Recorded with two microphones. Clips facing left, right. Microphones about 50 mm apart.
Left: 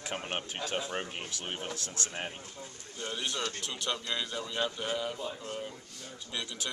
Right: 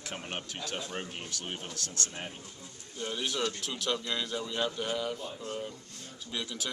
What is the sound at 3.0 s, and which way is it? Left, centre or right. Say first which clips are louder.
A man's voice: right 2 dB; centre.